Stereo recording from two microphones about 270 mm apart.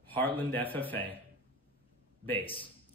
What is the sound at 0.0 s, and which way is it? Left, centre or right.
A man's voice, centre.